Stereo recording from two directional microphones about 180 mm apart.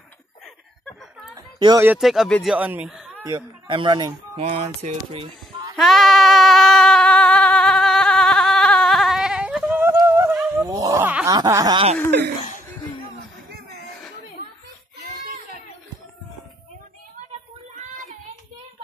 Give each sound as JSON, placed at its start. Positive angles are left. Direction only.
{"t": 1.3, "sound": "a sound", "side_deg": -20}
{"t": 1.9, "sound": "speech", "side_deg": 0}
{"t": 3.6, "sound": "snicker", "side_deg": -25}
{"t": 4.4, "sound": "speech", "side_deg": -35}
{"t": 5.8, "sound": "a sound", "side_deg": 0}
{"t": 10.3, "sound": "dog", "side_deg": 0}
{"t": 10.7, "sound": "groan", "side_deg": -20}
{"t": 11.2, "sound": "snicker", "side_deg": -20}